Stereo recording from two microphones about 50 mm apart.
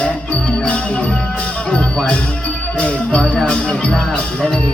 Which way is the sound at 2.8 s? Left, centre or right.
Centre.